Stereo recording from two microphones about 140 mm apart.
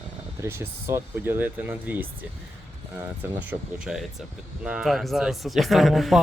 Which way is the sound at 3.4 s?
10° right (ahead or behind).